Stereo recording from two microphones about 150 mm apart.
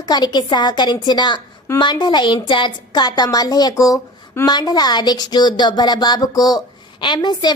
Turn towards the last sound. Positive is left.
turn(degrees=30)  # may be behind; listen again after turning